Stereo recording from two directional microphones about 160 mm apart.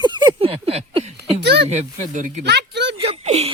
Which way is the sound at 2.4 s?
90° right.